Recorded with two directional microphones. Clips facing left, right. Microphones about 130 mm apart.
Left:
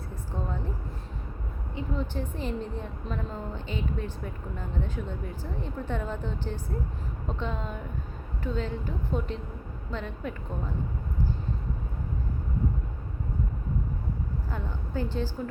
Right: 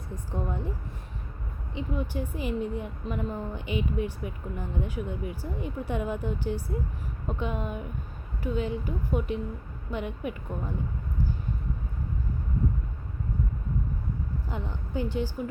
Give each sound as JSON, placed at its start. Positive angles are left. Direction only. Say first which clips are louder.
{"t": 0.3, "sound": "a woman's voice", "louder": "right 2 dB", "side_deg": -15}
{"t": 1.7, "sound": "a woman's voice", "louder": "right 1 dB", "side_deg": -15}
{"t": 14.5, "sound": "a woman's voice", "louder": "right 2 dB", "side_deg": -15}